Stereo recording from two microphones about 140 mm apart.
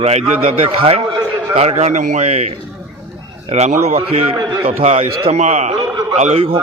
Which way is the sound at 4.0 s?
45° right (ahead or behind).